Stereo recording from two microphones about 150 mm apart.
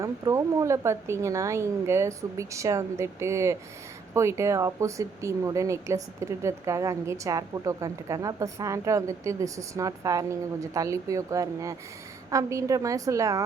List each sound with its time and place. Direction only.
0.0 s speech: 20° right (ahead or behind)